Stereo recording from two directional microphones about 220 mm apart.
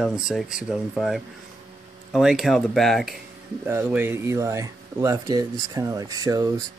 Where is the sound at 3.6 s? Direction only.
10° right (ahead or behind).